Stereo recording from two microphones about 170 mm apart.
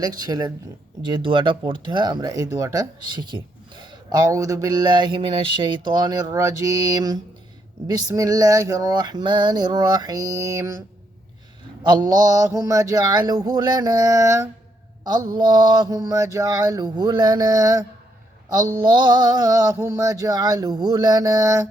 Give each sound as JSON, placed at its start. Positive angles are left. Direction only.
{"t": 0.0, "sound": "speech", "side_deg": -20}
{"t": 15.0, "sound": "mantra", "side_deg": -25}
{"t": 15.4, "sound": "speech", "side_deg": -25}